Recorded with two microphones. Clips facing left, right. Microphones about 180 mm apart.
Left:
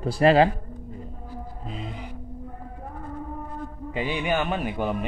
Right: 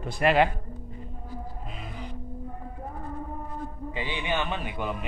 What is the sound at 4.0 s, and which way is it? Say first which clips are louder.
Speech: left 5 dB; 45° left (ahead or behind).